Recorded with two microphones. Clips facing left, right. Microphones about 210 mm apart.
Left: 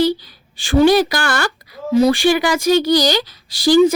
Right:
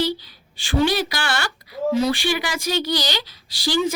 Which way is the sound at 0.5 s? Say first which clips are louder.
Left 8 dB; 45° left (ahead or behind).